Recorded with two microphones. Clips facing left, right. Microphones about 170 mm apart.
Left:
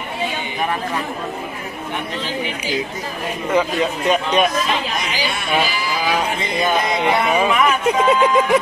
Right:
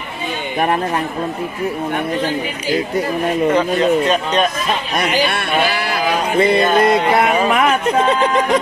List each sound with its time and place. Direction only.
3.5 s speech: 10° left (ahead or behind)
4.9 s speech: 60° right (ahead or behind)